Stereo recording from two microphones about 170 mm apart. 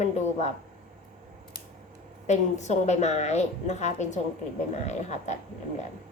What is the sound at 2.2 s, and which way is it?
A woman's voice, 45° left (ahead or behind).